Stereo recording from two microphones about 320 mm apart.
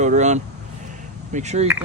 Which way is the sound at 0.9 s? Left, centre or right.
Right.